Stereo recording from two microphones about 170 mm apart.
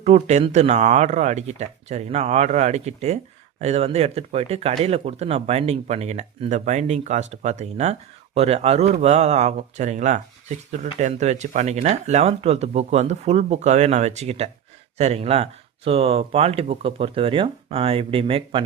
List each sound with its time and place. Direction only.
0.0 s speech: 40° right (ahead or behind)